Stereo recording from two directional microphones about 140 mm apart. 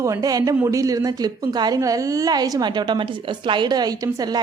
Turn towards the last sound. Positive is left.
turn(degrees=-25)  # may be behind; listen again after turning